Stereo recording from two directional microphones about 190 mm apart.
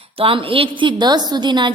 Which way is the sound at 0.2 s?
30° right (ahead or behind).